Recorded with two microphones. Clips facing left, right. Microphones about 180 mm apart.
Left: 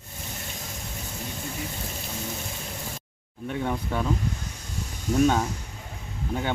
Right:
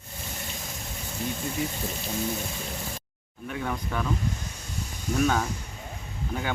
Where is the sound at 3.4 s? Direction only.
25° left (ahead or behind).